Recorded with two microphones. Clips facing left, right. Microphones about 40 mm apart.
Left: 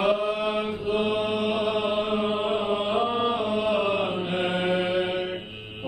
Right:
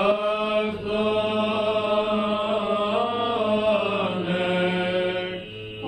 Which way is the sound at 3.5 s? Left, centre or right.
Centre.